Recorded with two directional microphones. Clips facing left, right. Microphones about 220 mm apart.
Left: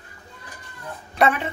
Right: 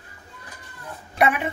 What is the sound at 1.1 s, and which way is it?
Speech, 10° right (ahead or behind).